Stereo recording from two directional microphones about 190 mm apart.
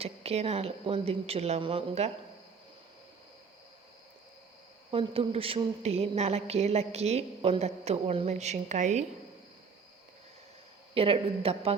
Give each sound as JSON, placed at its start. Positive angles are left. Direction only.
{"t": 0.0, "sound": "a woman's voice", "side_deg": -35}
{"t": 4.9, "sound": "a woman's voice", "side_deg": -30}
{"t": 10.9, "sound": "a woman's voice", "side_deg": -30}